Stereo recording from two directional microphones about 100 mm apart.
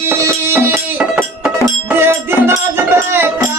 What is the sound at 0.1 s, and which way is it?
Music, 20° right (ahead or behind).